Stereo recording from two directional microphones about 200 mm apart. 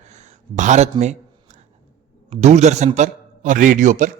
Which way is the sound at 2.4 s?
35° right (ahead or behind).